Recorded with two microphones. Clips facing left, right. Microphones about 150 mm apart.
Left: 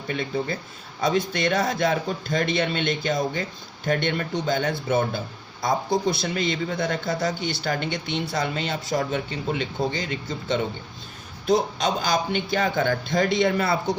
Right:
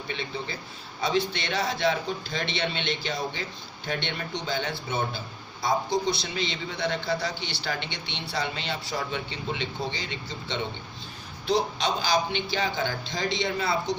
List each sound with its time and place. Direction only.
0.1 s speech: 45° left (ahead or behind)